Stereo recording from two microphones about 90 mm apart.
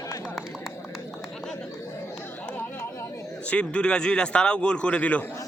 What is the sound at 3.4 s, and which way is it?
A man's voice, 10° left (ahead or behind).